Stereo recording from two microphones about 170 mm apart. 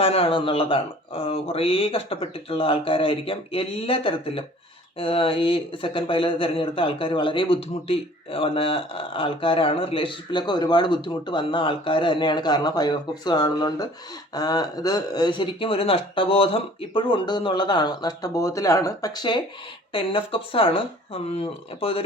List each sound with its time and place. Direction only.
0.0 s speech: 35° left (ahead or behind)